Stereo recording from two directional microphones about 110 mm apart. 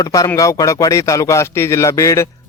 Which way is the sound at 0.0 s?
30° left (ahead or behind).